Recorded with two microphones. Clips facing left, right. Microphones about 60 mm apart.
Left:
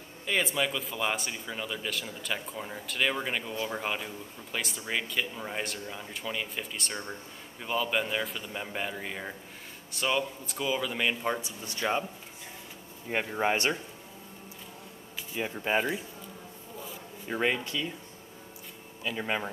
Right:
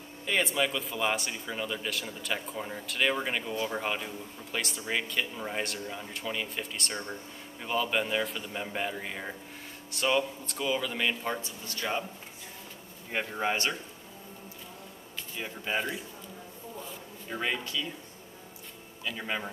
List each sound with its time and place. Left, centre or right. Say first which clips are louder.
0.2 s speech: right 1 dB; centre
11.6 s speech: left 4 dB; left
13.1 s speech: left 2 dB; centre
13.4 s speech: left 3 dB; left
15.3 s speech: left 4 dB; centre
17.3 s speech: left 3 dB; left
19.0 s speech: left 3 dB; centre